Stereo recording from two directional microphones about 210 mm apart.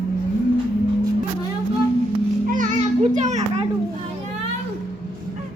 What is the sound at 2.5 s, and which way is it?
Children playing, 30° right (ahead or behind).